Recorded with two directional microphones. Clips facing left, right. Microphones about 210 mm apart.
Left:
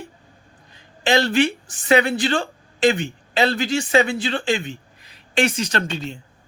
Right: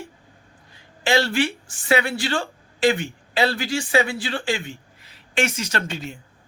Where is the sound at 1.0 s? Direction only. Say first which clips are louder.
Left 3 dB; 20° left (ahead or behind).